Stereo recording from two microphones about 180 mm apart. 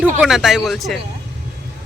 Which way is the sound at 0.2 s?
Centre (ahead or behind).